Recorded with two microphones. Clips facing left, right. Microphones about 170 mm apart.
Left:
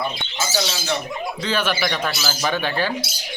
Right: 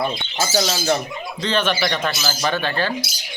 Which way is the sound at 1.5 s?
10° left (ahead or behind).